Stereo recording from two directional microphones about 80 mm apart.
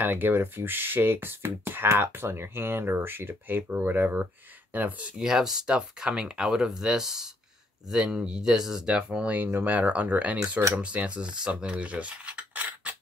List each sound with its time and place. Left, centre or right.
0.0 s speech: right